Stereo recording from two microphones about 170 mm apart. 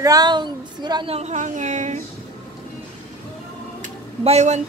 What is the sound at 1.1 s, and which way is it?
Speech, 40° right (ahead or behind).